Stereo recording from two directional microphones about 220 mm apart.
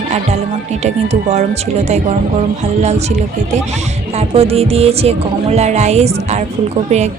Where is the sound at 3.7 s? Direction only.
30° right (ahead or behind).